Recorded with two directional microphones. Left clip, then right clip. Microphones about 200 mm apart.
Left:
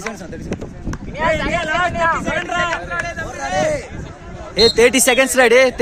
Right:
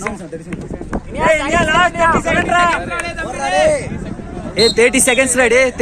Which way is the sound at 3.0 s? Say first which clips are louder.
Right 4 dB; 40° right (ahead or behind).